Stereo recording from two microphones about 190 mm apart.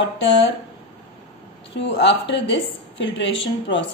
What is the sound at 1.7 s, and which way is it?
Speech, 65° left (ahead or behind).